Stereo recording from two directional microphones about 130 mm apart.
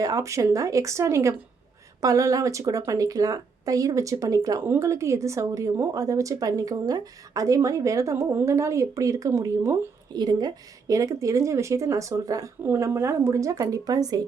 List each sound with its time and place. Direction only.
0.0 s a woman's voice: 25° right (ahead or behind)